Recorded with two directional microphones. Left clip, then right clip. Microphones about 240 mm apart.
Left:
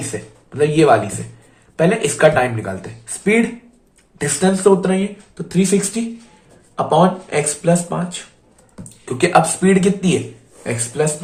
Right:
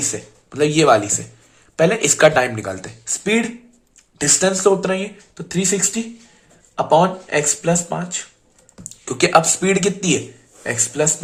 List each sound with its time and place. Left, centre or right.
0.1 s speech: right
9.0 s speech: right